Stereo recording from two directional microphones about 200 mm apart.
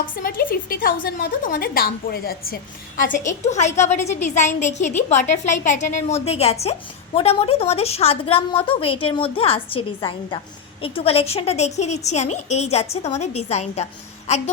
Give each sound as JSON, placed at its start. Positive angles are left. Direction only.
{"t": 0.0, "sound": "a woman's voice", "side_deg": 45}